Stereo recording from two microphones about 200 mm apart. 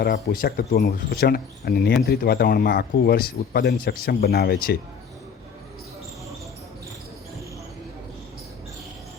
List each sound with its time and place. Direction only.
0.0 s a man's voice: 55° left (ahead or behind)